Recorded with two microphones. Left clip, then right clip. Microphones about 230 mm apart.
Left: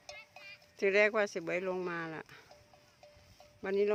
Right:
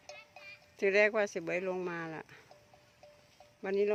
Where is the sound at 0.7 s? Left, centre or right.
Centre.